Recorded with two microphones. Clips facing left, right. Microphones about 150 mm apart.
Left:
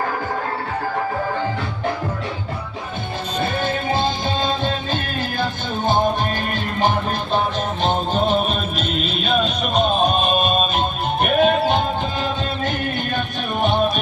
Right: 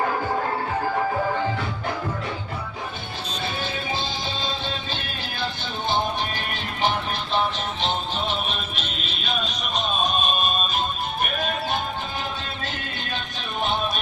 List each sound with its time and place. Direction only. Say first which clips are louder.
3.4 s music: left 8 dB; 50° left (ahead or behind)
7.3 s music: left 3 dB; 45° left (ahead or behind)
10.8 s music: left 6 dB; 55° left (ahead or behind)
13.1 s music: left 7 dB; 50° left (ahead or behind)